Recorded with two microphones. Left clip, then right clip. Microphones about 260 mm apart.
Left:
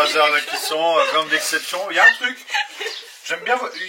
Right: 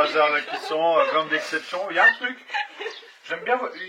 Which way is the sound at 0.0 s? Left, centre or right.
Centre.